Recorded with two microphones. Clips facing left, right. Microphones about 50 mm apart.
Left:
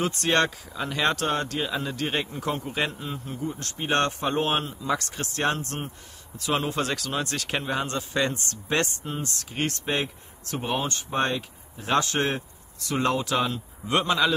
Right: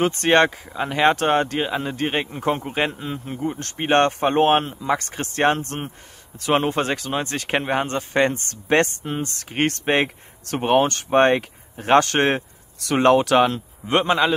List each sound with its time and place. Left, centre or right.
0.0 s speech: right
13.8 s speech: right